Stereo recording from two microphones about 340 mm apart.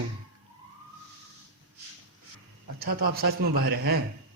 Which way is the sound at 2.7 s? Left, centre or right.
Right.